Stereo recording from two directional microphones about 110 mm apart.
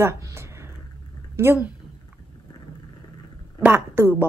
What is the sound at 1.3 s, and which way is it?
Speech, 20° right (ahead or behind).